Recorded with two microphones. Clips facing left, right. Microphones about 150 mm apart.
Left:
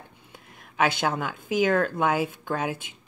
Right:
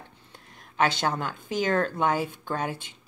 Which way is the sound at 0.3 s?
5° left (ahead or behind).